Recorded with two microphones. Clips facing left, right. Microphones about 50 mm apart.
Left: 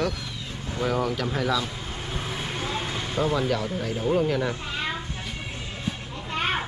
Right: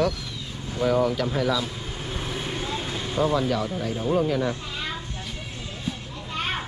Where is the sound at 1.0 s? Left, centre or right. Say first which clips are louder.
Right 4 dB; centre.